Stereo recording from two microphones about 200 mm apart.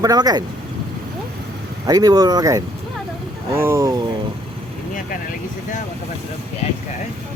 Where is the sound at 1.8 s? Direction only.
20° right (ahead or behind).